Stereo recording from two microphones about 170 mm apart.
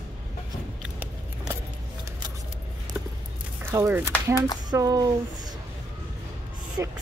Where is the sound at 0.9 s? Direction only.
10° right (ahead or behind).